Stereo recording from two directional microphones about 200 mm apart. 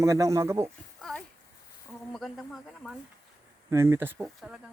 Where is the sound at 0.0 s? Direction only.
15° right (ahead or behind).